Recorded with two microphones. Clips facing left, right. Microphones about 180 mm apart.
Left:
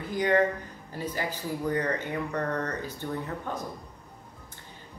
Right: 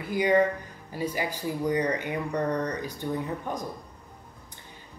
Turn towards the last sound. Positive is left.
turn(degrees=-15)  # may be behind; listen again after turning